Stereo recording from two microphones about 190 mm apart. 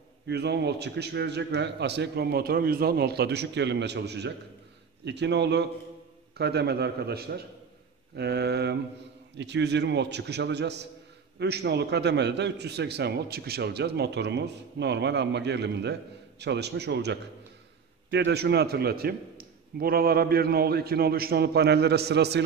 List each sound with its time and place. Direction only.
0.3 s a man's voice: 60° right (ahead or behind)